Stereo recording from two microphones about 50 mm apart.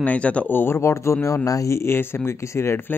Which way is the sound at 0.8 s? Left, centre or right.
Left.